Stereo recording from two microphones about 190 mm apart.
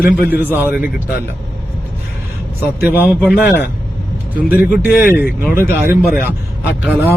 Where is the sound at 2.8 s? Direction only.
10° right (ahead or behind).